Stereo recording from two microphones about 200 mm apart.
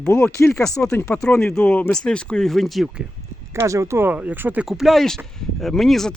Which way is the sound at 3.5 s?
15° right (ahead or behind).